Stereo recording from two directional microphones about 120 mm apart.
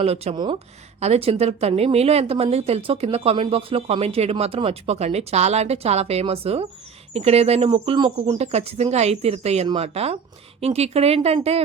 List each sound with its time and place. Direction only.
0.0 s a woman's voice: 60° right (ahead or behind)
7.7 s speech: 40° right (ahead or behind)
8.4 s a woman's voice: 60° right (ahead or behind)